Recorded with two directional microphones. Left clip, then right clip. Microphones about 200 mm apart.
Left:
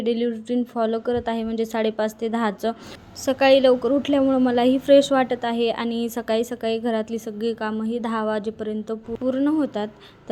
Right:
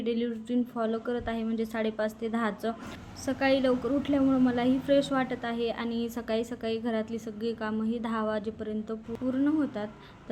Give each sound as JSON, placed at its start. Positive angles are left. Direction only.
{"t": 0.0, "sound": "a woman's voice", "side_deg": 30}